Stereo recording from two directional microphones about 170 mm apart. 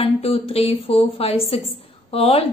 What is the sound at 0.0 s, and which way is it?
A woman's voice, 35° left (ahead or behind).